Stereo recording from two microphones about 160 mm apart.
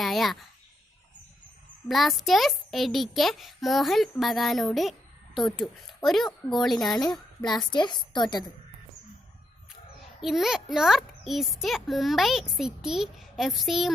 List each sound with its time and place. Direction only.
0.0 s a woman's voice: centre (ahead or behind)
1.9 s a child's voice: centre (ahead or behind)
7.4 s a woman's voice: 25° left (ahead or behind)
10.2 s a child's voice: centre (ahead or behind)